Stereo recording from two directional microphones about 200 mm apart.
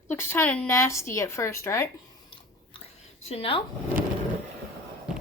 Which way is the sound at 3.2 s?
30° left (ahead or behind).